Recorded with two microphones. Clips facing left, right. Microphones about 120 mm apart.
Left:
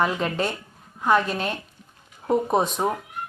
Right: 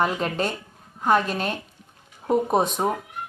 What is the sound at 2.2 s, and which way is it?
Speech, centre (ahead or behind).